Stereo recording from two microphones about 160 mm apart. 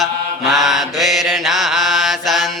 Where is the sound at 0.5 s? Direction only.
Centre (ahead or behind).